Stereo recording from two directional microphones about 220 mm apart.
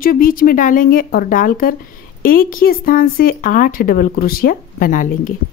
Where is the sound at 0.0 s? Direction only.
40° left (ahead or behind).